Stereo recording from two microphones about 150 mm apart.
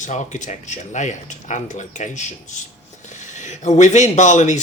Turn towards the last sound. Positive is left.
turn(degrees=55)  # may be behind; listen again after turning